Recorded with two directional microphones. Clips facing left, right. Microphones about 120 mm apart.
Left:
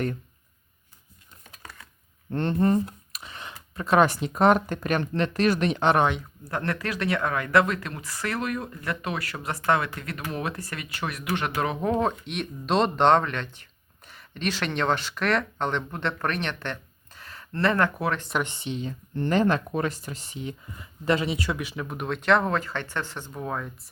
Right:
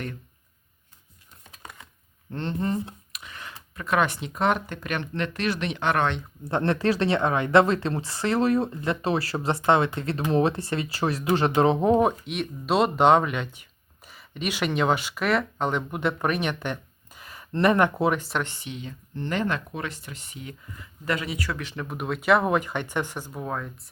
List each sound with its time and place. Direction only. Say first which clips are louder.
1.6 s computer keyboard: right 2 dB; 15° right (ahead or behind)
2.3 s speech: left 5 dB; 50° left (ahead or behind)
3.1 s speech: left 1 dB; 30° left (ahead or behind)
6.0 s speech: left 2 dB; 5° left (ahead or behind)
6.4 s speech: right 7 dB; 25° right (ahead or behind)
12.2 s speech: right 2 dB; 5° right (ahead or behind); by 18.2 s 20° right (ahead or behind)
18.4 s speech: left 5 dB; 25° left (ahead or behind)
21.6 s speech: even; 5° left (ahead or behind)